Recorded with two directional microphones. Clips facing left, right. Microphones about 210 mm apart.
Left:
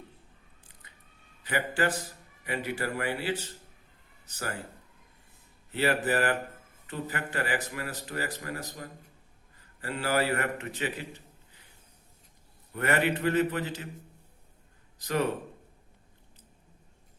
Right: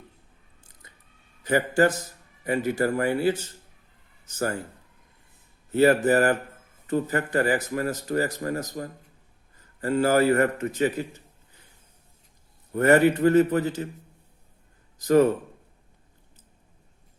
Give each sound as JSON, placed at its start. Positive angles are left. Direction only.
{"t": 0.6, "sound": "a sound", "side_deg": -45}
{"t": 1.5, "sound": "a man's voice", "side_deg": -45}
{"t": 5.7, "sound": "a man's voice", "side_deg": -45}
{"t": 12.7, "sound": "a man's voice", "side_deg": -45}
{"t": 14.9, "sound": "a man's voice", "side_deg": -45}